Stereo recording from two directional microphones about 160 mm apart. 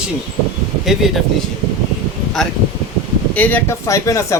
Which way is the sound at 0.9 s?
Centre (ahead or behind).